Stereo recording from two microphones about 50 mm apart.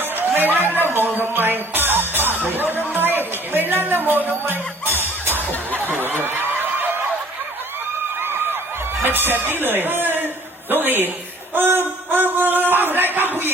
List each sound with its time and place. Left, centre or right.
0.0 s chatter: right
0.7 s music: right
8.2 s a sound: right
9.0 s speech: right